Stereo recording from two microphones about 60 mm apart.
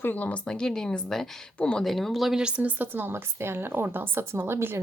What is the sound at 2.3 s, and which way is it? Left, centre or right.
Speech, centre.